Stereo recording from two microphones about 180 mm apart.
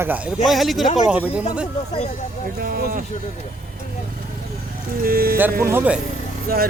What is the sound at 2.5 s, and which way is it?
Speech, 55° right (ahead or behind).